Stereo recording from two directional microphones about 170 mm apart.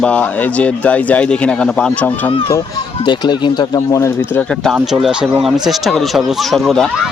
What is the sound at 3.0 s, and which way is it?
Speech, 25° left (ahead or behind).